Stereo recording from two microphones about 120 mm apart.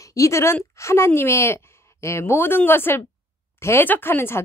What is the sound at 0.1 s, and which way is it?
Speech, 25° left (ahead or behind).